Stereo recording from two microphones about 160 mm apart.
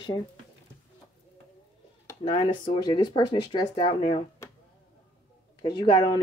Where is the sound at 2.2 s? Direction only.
30° left (ahead or behind).